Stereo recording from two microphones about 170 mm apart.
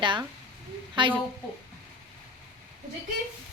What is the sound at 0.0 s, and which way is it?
Speech, 30° right (ahead or behind).